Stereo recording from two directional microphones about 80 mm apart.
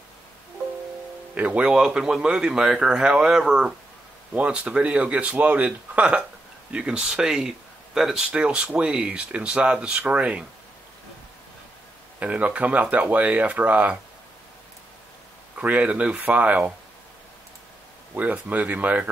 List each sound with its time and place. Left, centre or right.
1.3 s speech: centre
12.2 s speech: centre
15.5 s speech: centre
18.1 s speech: centre